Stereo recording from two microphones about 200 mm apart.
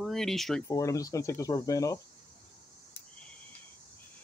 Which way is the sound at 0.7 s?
15° left (ahead or behind).